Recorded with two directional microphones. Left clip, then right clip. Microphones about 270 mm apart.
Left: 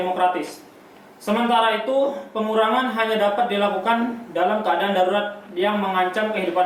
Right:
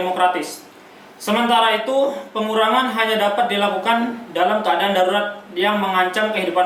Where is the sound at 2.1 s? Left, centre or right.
Centre.